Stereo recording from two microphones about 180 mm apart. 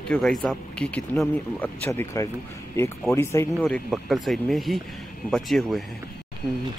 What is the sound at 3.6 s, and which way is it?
Speech, centre (ahead or behind).